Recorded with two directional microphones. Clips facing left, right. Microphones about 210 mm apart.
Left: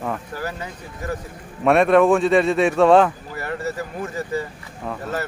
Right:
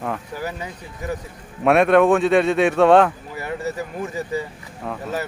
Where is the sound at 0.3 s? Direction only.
15° right (ahead or behind).